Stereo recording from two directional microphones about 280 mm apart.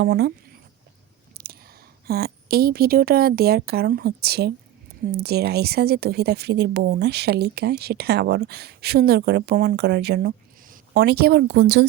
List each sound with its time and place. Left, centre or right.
0.0 s speech: right
2.0 s speech: right